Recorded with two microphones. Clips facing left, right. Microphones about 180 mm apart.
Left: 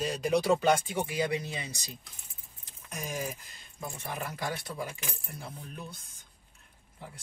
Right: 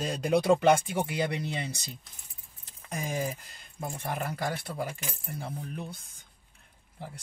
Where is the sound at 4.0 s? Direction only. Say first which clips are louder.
Right 4 dB; 60° right (ahead or behind).